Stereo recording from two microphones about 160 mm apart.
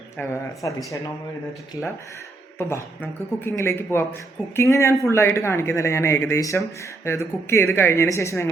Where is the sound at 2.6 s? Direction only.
15° left (ahead or behind).